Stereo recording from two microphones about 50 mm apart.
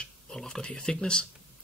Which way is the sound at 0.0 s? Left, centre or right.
Centre.